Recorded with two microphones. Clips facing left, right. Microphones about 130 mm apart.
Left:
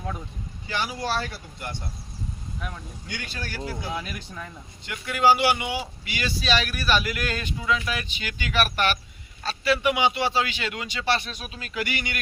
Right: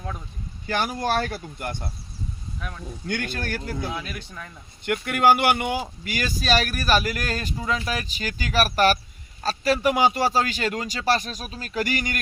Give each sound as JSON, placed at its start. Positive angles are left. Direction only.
{"t": 0.7, "sound": "speech", "side_deg": -50}
{"t": 3.1, "sound": "speech", "side_deg": -50}
{"t": 3.9, "sound": "speech", "side_deg": 5}
{"t": 4.9, "sound": "speech", "side_deg": -55}